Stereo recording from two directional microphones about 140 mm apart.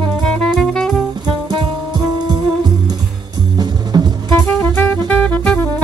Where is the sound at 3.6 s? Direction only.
30° right (ahead or behind).